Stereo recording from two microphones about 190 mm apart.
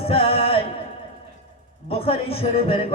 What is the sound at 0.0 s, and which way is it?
Music, 30° left (ahead or behind).